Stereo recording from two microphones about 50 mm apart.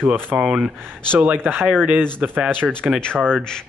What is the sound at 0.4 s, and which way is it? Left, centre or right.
Speech, right.